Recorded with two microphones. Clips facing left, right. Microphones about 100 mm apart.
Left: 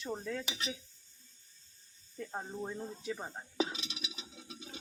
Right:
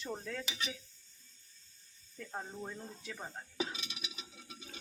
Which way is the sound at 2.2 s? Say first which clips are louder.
Left 3 dB; 15° left (ahead or behind).